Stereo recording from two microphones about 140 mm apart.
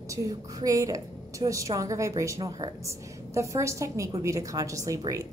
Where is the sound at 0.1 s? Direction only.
25° right (ahead or behind).